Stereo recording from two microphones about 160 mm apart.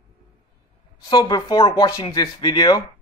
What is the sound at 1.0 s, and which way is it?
Speech, 25° left (ahead or behind).